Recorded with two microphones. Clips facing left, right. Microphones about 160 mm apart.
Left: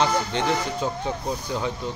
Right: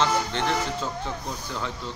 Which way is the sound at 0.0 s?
15° left (ahead or behind).